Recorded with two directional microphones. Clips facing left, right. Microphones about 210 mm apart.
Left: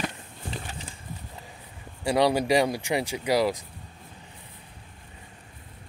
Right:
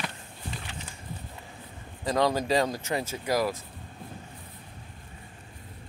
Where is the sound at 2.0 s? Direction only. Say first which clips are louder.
Left 3 dB; 15° left (ahead or behind).